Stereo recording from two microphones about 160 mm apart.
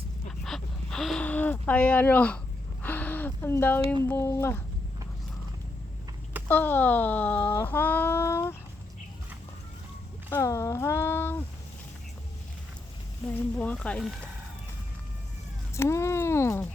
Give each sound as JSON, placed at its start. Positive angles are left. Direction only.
{"t": 0.3, "sound": "a sound", "side_deg": 5}
{"t": 4.0, "sound": "speech", "side_deg": 15}
{"t": 6.5, "sound": "speech", "side_deg": 10}
{"t": 10.3, "sound": "speech", "side_deg": 20}
{"t": 13.3, "sound": "speech", "side_deg": 10}
{"t": 15.7, "sound": "speech", "side_deg": 15}